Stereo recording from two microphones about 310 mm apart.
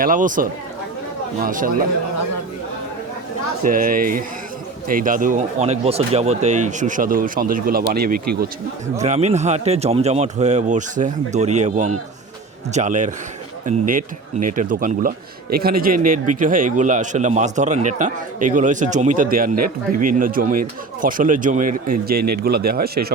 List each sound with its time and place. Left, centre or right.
0.0 s a man's voice: right
1.5 s a man's voice: right
3.6 s a man's voice: right